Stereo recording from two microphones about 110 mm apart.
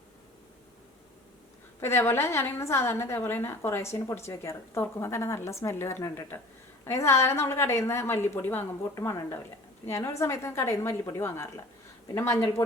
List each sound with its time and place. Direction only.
1.8 s a woman's voice: 20° left (ahead or behind)